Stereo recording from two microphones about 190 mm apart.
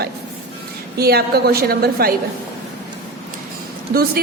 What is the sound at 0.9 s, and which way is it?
A woman's voice, 55° right (ahead or behind).